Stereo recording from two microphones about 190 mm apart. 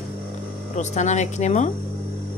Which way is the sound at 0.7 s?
40° left (ahead or behind).